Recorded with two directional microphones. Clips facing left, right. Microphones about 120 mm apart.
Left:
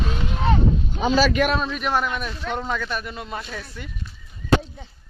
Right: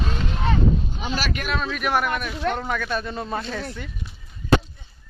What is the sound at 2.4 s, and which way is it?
Speech, 60° right (ahead or behind).